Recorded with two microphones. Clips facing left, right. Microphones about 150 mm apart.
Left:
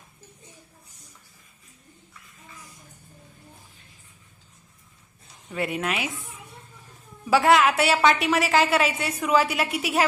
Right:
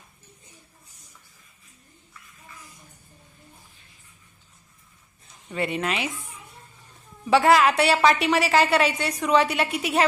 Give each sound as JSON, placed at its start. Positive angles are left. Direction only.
{"t": 5.5, "sound": "a woman's voice", "side_deg": 0}
{"t": 7.3, "sound": "a woman's voice", "side_deg": 0}